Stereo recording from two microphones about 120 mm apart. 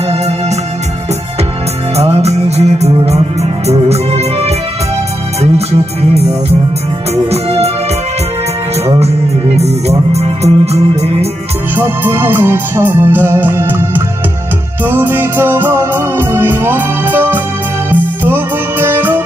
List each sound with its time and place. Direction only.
2.0 s music: 60° right (ahead or behind)
8.8 s music: 60° right (ahead or behind)
11.7 s music: 15° right (ahead or behind)